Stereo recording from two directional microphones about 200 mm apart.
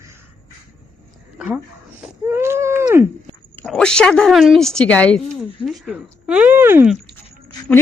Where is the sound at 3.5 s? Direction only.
5° left (ahead or behind); by 6.9 s 10° right (ahead or behind).